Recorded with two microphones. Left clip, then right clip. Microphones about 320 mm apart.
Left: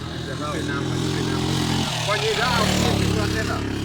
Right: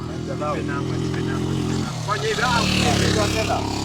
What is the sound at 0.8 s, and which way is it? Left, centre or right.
Speech, left.